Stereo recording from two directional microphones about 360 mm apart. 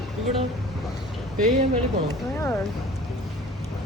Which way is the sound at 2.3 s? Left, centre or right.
Centre.